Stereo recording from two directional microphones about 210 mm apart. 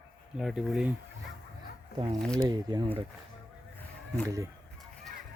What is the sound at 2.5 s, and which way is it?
Speech, 20° right (ahead or behind).